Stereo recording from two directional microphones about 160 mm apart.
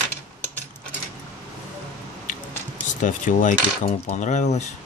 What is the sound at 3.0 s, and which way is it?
Speech, 55° left (ahead or behind).